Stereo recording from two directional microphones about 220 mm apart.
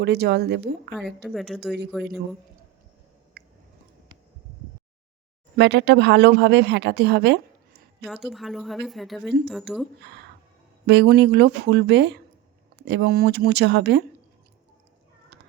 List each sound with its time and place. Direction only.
0.0 s speech: 50° right (ahead or behind)
1.2 s a woman's voice: centre (ahead or behind)
3.4 s a sound: 45° right (ahead or behind)
5.5 s speech: 50° right (ahead or behind)
8.0 s a woman's voice: centre (ahead or behind)
10.0 s speech: 50° right (ahead or behind)